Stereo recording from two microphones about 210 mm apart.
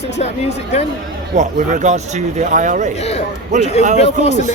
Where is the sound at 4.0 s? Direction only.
30° left (ahead or behind).